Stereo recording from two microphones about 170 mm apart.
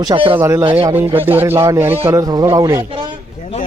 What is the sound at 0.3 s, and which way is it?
A man's voice, 15° right (ahead or behind).